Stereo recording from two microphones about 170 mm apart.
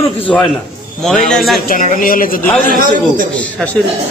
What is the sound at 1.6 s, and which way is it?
Speech, 50° left (ahead or behind).